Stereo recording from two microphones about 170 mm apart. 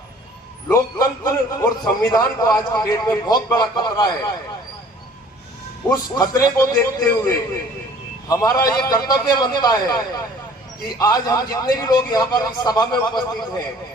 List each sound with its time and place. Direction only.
0.7 s a man's voice: 20° left (ahead or behind)
5.9 s a man's voice: 20° left (ahead or behind)